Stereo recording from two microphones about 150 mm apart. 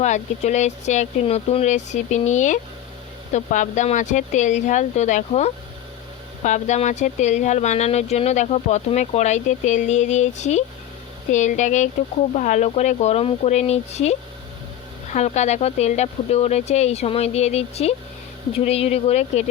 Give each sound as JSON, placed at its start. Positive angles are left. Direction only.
{"t": 0.0, "sound": "speech", "side_deg": 50}